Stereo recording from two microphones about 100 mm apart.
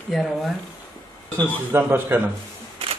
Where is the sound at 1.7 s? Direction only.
20° right (ahead or behind).